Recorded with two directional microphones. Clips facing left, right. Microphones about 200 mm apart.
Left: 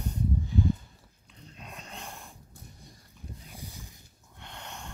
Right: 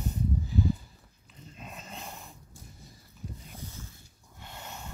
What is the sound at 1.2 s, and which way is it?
Dog, centre (ahead or behind).